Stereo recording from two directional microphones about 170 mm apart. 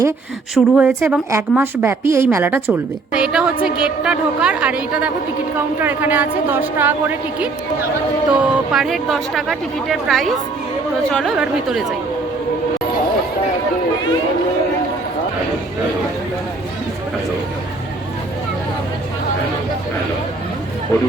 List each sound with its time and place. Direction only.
0.5 s speech: 5° right (ahead or behind)
20.9 s speech: 15° left (ahead or behind)